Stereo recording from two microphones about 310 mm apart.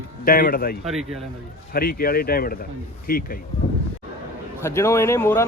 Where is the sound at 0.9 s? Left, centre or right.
Centre.